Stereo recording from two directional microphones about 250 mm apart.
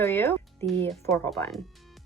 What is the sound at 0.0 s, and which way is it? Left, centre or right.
Speech, centre.